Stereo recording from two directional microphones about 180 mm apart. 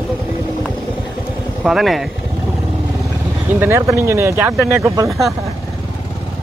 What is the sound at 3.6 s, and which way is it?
Speech, 15° right (ahead or behind).